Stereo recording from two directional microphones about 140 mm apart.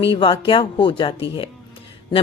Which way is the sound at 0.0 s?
40° left (ahead or behind).